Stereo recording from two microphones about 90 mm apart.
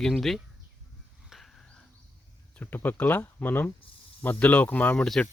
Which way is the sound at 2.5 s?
20° left (ahead or behind).